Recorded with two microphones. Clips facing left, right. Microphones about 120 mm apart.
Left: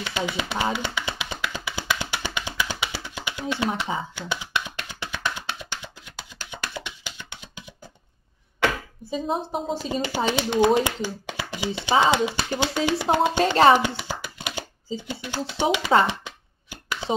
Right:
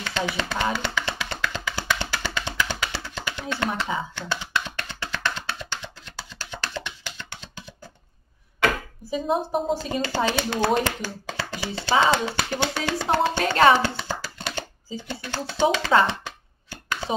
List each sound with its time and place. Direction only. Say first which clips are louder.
0.3 s speech: even; 15° left (ahead or behind)
0.7 s music: right 1 dB; 20° left (ahead or behind)
9.3 s a woman's voice: right 4 dB; centre (ahead or behind)
9.8 s speech: right 1 dB; 20° left (ahead or behind)
13.4 s speech: left 2 dB; 30° left (ahead or behind)
13.7 s hands: even; 15° left (ahead or behind)
14.9 s speech: left 4 dB; 15° left (ahead or behind)
15.7 s a sound: even; 20° left (ahead or behind)